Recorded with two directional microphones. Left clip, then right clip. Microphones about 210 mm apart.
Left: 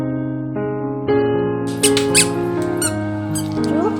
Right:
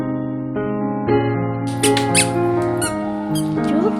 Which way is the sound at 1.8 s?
15° right (ahead or behind).